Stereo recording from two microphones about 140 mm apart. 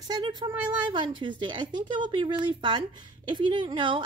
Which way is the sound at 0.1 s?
30° right (ahead or behind).